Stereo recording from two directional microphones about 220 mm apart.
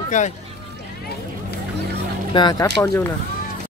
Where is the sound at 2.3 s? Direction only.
20° left (ahead or behind).